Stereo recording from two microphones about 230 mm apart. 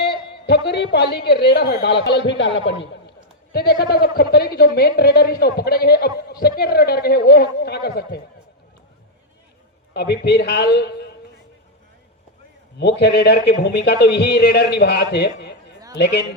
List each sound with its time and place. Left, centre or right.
0.0 s a man's voice: left
9.9 s a woman's voice: left
12.8 s a woman's voice: left